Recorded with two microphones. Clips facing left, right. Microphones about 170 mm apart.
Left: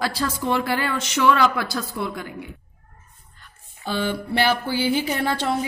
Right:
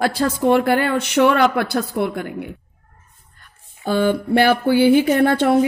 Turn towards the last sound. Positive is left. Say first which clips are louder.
# right 9 dB
turn(degrees=-55)  # may be behind; listen again after turning